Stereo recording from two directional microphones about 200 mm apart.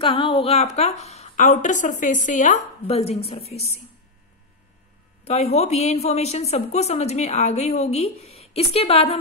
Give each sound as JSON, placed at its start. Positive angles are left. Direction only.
{"t": 0.0, "sound": "a woman's voice", "side_deg": 25}
{"t": 5.2, "sound": "a woman's voice", "side_deg": 30}